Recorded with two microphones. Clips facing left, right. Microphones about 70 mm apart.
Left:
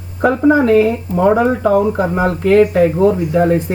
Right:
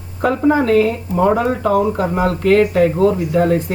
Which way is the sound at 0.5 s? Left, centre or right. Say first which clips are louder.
Left 3 dB; centre.